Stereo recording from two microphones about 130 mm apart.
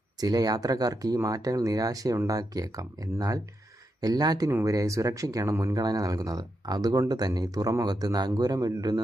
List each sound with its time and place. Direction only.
0.2 s speech: 30° right (ahead or behind)